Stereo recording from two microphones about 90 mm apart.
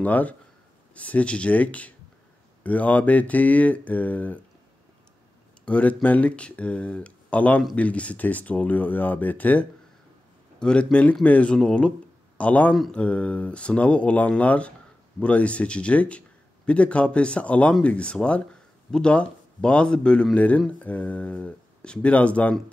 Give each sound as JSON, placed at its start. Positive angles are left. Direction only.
{"t": 0.0, "sound": "speech", "side_deg": 15}
{"t": 5.7, "sound": "speech", "side_deg": 15}